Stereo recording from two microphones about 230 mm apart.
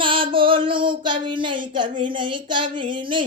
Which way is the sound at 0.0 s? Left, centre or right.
Right.